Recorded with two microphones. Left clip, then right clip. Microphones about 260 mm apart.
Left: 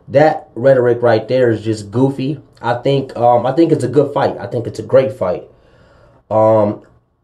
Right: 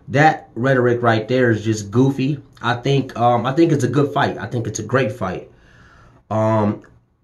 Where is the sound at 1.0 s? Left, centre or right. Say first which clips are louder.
Left 4 dB; right.